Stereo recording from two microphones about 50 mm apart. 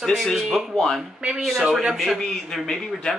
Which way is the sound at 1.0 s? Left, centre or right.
Centre.